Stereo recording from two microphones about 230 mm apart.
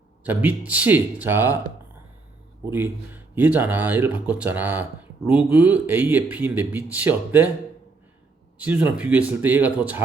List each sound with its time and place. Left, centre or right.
0.3 s speech: centre
2.6 s speech: centre
8.5 s speech: centre